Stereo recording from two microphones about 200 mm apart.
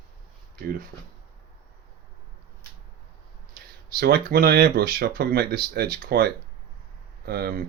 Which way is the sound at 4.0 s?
50° right (ahead or behind).